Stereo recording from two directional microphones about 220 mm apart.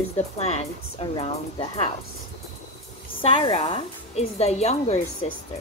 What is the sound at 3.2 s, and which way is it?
A woman's voice, 25° left (ahead or behind).